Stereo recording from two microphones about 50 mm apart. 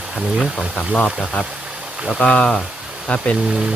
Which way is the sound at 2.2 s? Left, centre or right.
Left.